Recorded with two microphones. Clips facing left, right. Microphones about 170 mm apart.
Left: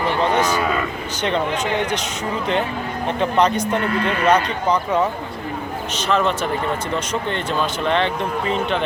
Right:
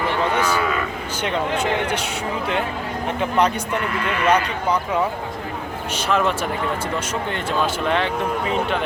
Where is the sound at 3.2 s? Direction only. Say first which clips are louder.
Left 2 dB; 10° right (ahead or behind).